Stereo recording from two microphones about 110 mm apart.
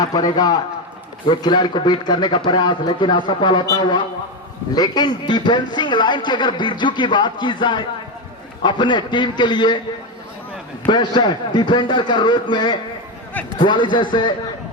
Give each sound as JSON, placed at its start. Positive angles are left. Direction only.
{"t": 0.0, "sound": "a man's voice", "side_deg": 35}
{"t": 10.8, "sound": "a man's voice", "side_deg": 45}